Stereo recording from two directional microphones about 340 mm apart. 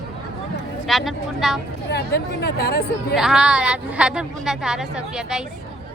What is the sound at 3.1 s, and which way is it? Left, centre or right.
Speech, centre.